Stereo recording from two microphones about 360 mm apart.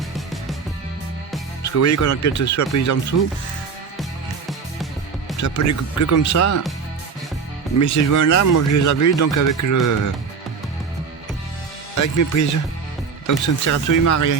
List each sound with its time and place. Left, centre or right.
1.6 s speech: left
5.4 s speech: left
7.8 s speech: left
11.9 s speech: left